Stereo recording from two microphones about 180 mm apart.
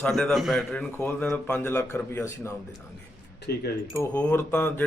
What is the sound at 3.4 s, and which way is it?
Speech, 60° left (ahead or behind).